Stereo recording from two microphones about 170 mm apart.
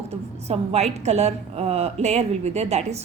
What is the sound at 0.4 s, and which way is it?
A woman's voice, 40° right (ahead or behind).